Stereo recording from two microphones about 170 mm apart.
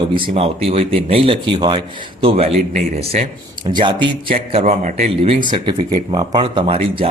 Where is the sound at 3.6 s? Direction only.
30° right (ahead or behind).